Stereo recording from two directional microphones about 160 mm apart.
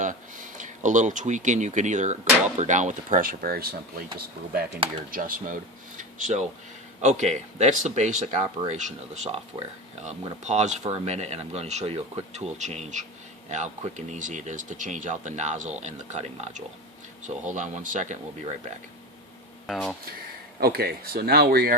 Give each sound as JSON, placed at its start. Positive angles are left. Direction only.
{"t": 0.0, "sound": "speech", "side_deg": -50}
{"t": 5.1, "sound": "speech", "side_deg": -60}
{"t": 6.0, "sound": "a sound", "side_deg": -50}
{"t": 7.0, "sound": "speech", "side_deg": -45}
{"t": 10.4, "sound": "speech", "side_deg": -45}
{"t": 19.6, "sound": "speech", "side_deg": 0}
{"t": 20.1, "sound": "speech", "side_deg": -70}